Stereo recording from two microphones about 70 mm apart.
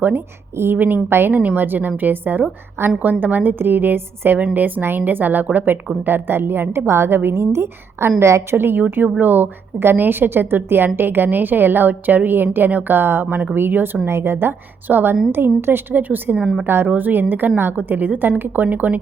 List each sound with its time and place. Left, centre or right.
0.0 s a woman's voice: right
8.5 s speech: right